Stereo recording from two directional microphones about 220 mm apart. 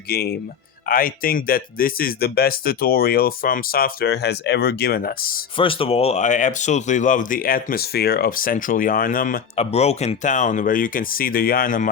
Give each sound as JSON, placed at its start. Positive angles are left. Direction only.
{"t": 0.1, "sound": "speech", "side_deg": 45}
{"t": 5.5, "sound": "speech", "side_deg": 25}